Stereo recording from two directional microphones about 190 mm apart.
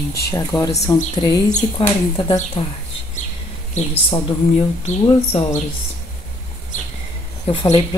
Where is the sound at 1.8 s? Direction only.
30° left (ahead or behind).